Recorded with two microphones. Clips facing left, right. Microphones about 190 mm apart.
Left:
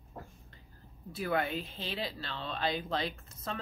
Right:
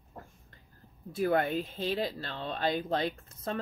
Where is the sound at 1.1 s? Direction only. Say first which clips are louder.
Right 5 dB; 45° right (ahead or behind).